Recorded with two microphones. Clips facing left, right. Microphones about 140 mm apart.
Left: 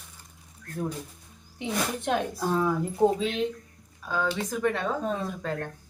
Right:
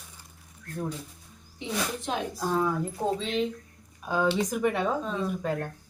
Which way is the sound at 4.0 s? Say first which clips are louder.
Right 3 dB; 15° right (ahead or behind).